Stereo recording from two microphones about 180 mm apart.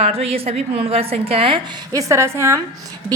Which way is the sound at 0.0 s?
35° right (ahead or behind).